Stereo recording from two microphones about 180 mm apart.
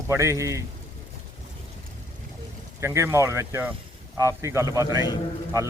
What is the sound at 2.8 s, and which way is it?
Speech, 15° right (ahead or behind).